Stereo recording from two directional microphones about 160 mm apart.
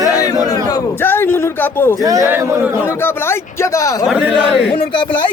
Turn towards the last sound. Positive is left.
turn(degrees=30)  # may be behind; listen again after turning